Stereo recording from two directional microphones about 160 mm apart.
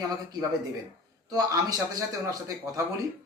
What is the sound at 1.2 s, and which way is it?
A man's voice, 25° right (ahead or behind).